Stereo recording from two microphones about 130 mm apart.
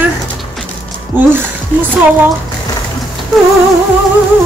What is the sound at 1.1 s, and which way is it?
Speech, 15° right (ahead or behind).